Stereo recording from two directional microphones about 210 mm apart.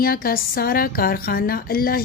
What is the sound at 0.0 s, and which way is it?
A woman's voice, 45° left (ahead or behind).